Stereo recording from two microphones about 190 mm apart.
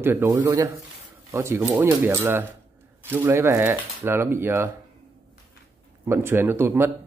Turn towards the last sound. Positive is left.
turn(degrees=-10)  # may be behind; listen again after turning